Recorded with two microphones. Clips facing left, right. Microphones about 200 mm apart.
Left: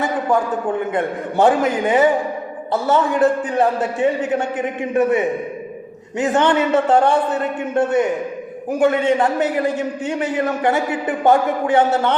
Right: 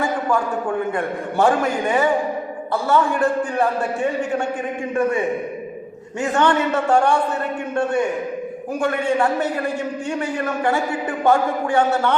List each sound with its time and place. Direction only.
0.9 s a man's voice: 20° left (ahead or behind)
6.1 s a man's voice: 20° left (ahead or behind)